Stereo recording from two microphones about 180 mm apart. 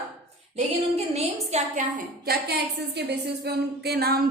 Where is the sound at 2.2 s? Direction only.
60° right (ahead or behind).